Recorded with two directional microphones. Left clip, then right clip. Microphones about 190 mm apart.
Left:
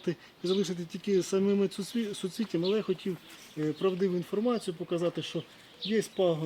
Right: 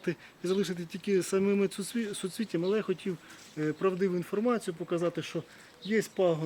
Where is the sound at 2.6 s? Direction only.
20° left (ahead or behind).